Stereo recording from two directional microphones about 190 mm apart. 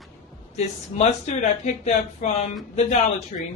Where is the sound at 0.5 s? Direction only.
35° left (ahead or behind).